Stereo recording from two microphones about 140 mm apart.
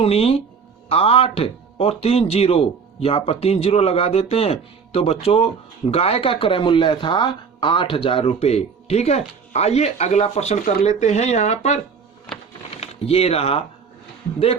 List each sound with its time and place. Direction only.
0.0 s speech: 45° left (ahead or behind)
12.8 s speech: 45° left (ahead or behind)